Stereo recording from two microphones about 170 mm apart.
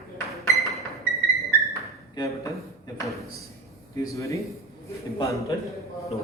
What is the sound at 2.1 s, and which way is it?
Speech, 20° left (ahead or behind).